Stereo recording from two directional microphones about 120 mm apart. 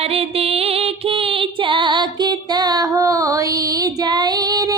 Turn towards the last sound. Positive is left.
turn(degrees=-30)  # may be behind; listen again after turning